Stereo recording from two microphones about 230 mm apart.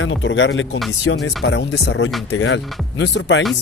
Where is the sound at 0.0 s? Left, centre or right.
Left.